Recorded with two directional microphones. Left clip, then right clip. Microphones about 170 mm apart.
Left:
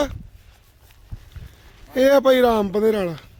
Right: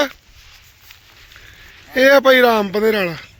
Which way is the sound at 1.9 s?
5° left (ahead or behind).